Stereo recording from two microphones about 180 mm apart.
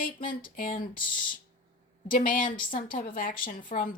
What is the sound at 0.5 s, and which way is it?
Speech, 50° left (ahead or behind).